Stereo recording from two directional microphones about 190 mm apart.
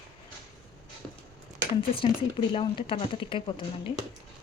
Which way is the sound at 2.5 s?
25° left (ahead or behind).